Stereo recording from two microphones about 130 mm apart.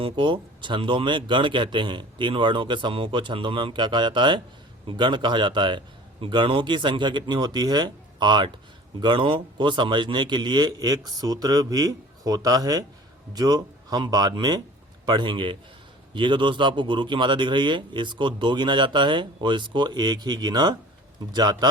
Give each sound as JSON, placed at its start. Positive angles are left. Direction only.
{"t": 0.0, "sound": "a man's voice", "side_deg": -40}